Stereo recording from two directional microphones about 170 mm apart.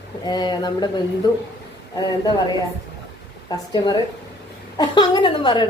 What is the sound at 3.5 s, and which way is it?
A woman's voice, 25° left (ahead or behind).